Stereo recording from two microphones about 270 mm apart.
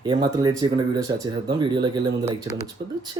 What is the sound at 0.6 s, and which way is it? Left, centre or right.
Speech, centre.